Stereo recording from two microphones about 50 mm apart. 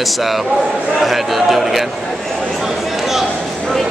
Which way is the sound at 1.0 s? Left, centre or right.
Centre.